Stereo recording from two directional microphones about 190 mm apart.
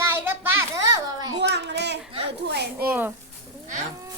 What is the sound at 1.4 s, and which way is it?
Speech, 65° right (ahead or behind).